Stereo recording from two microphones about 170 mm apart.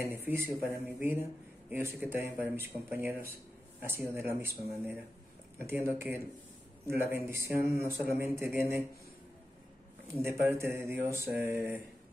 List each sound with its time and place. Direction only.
0.0 s speech: 15° right (ahead or behind)
10.2 s speech: 15° right (ahead or behind)